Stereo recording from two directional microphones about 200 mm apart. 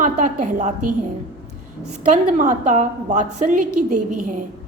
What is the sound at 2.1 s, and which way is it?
A woman's voice, 40° right (ahead or behind).